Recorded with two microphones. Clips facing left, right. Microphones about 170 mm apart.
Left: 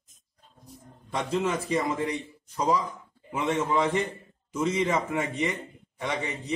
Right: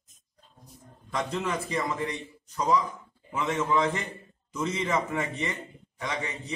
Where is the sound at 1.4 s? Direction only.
30° left (ahead or behind).